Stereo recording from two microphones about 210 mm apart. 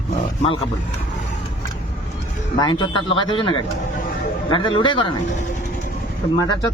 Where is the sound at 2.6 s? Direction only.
20° left (ahead or behind).